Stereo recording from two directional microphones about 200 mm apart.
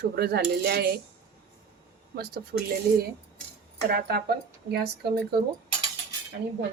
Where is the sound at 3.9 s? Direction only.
50° right (ahead or behind).